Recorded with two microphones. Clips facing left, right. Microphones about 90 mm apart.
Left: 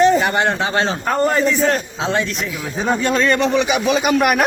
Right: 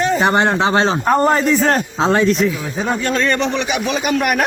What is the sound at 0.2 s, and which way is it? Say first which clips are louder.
Speech: right 3 dB; 30° right (ahead or behind).